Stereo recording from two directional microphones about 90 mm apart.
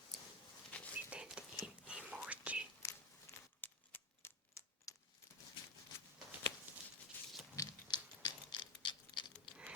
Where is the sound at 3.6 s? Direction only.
20° left (ahead or behind).